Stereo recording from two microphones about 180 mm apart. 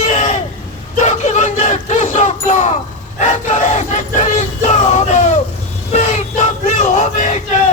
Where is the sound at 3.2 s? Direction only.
40° left (ahead or behind).